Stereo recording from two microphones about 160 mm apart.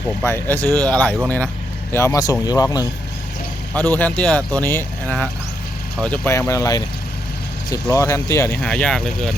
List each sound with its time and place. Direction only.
0.3 s speech: 15° left (ahead or behind)
3.8 s speech: 10° left (ahead or behind)